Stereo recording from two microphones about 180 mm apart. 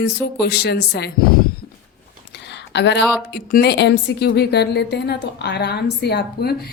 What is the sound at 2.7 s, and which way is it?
Speech, 75° left (ahead or behind).